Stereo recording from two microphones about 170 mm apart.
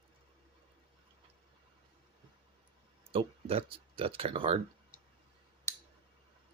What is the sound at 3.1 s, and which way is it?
Speech, 35° right (ahead or behind).